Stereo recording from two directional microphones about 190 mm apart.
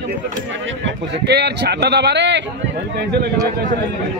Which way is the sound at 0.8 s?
60° right (ahead or behind).